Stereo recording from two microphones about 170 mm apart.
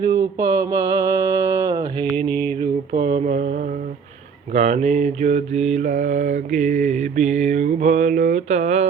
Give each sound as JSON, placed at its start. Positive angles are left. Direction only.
{"t": 0.0, "sound": "mantra", "side_deg": -20}
{"t": 2.3, "sound": "mantra", "side_deg": 10}
{"t": 3.1, "sound": "mantra", "side_deg": -40}